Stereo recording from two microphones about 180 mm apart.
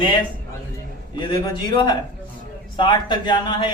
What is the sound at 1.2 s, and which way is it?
Speech, 25° left (ahead or behind).